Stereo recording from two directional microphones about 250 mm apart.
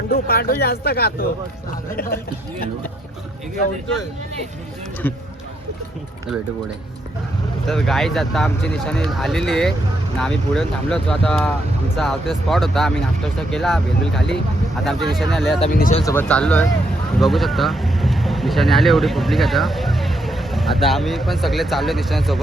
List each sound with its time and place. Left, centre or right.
0.1 s speech: left
5.0 s speech: centre
7.7 s speech: centre
15.6 s speech: left
16.0 s speech: centre